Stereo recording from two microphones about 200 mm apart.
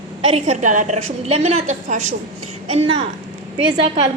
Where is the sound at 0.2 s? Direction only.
30° right (ahead or behind).